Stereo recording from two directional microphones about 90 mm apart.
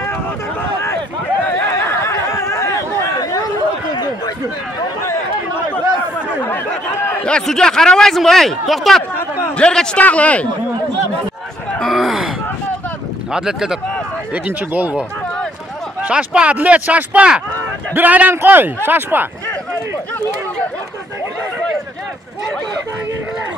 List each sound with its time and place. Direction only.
0.0 s a sound: 25° left (ahead or behind)
1.9 s chatter: 30° left (ahead or behind)
7.2 s a man's voice: 10° left (ahead or behind)
11.8 s speech: centre (ahead or behind)
13.3 s speech: 5° right (ahead or behind)
14.3 s speech: 20° right (ahead or behind)
16.0 s speech: 15° right (ahead or behind)